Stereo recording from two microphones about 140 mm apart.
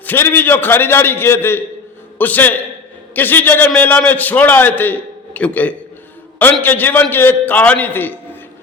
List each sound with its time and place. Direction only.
0.0 s a man's voice: 15° left (ahead or behind)